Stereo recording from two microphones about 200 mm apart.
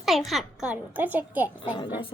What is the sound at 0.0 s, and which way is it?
A child's voice, centre (ahead or behind).